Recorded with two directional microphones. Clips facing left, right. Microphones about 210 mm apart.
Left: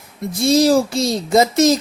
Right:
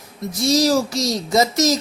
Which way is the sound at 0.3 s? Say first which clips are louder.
Left 3 dB; 55° left (ahead or behind).